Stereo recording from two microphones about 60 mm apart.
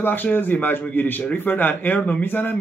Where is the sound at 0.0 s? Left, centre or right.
Left.